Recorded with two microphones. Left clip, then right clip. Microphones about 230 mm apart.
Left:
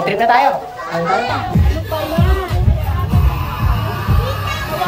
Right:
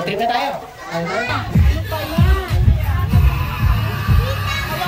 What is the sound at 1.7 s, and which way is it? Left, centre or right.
Music, left.